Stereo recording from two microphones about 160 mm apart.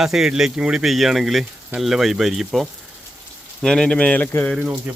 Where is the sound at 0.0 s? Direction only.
5° right (ahead or behind).